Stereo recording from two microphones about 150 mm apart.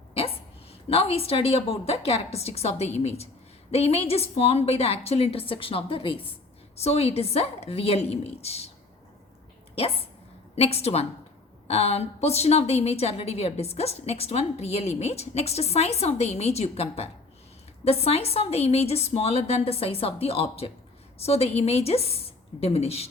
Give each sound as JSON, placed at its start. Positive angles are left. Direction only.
{"t": 0.1, "sound": "a sound", "side_deg": 40}
{"t": 0.9, "sound": "a woman's voice", "side_deg": 40}
{"t": 9.7, "sound": "a woman's voice", "side_deg": 40}